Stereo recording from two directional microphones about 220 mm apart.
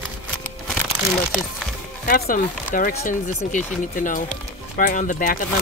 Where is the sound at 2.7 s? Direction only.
40° left (ahead or behind).